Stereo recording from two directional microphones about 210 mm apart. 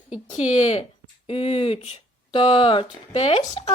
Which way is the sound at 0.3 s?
30° left (ahead or behind).